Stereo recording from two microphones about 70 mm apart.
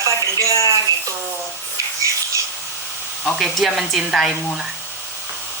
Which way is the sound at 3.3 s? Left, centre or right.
Centre.